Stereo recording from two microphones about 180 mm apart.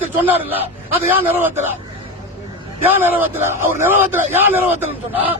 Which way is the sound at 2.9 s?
10° right (ahead or behind).